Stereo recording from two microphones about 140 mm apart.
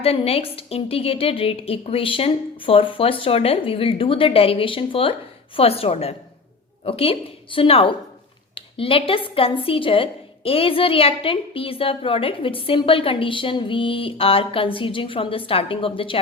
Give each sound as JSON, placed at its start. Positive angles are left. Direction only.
{"t": 0.0, "sound": "a woman's voice", "side_deg": 45}